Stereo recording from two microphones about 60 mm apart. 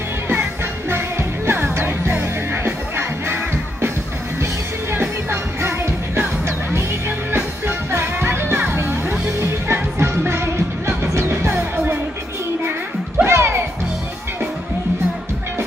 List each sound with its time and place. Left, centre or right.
0.3 s music: right
5.3 s music: right
9.0 s music: right
9.4 s music: right
13.2 s music: right